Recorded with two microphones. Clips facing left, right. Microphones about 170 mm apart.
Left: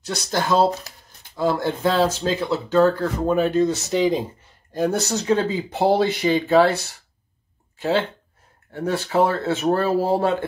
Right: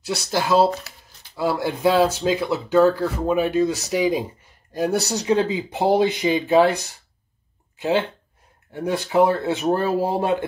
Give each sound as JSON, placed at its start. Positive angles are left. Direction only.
{"t": 0.0, "sound": "speech", "side_deg": -5}